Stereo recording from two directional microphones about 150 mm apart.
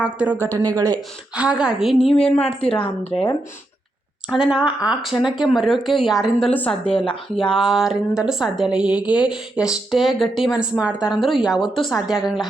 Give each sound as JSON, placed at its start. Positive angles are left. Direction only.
{"t": 0.0, "sound": "speech", "side_deg": -10}
{"t": 0.4, "sound": "speech", "side_deg": -20}
{"t": 1.4, "sound": "a woman's voice", "side_deg": -5}
{"t": 2.8, "sound": "speech", "side_deg": 40}
{"t": 4.3, "sound": "a woman's voice", "side_deg": -5}
{"t": 6.5, "sound": "a woman's voice", "side_deg": 10}
{"t": 6.8, "sound": "speech", "side_deg": 35}
{"t": 7.5, "sound": "a woman's voice", "side_deg": 0}